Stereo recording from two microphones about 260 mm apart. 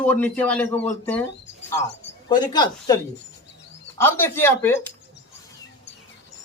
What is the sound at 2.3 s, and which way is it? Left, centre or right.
Speech, centre.